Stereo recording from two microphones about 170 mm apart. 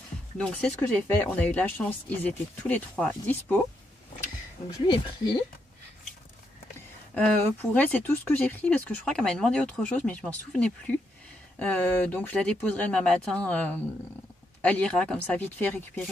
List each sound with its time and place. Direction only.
0.4 s speech: 5° left (ahead or behind)
4.8 s speech: 25° left (ahead or behind)
7.2 s speech: 10° left (ahead or behind)